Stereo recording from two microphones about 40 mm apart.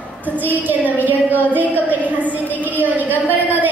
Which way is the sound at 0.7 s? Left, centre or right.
Right.